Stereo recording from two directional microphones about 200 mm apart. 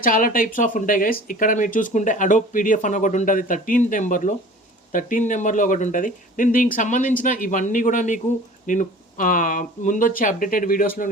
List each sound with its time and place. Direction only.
0.0 s speech: 45° left (ahead or behind)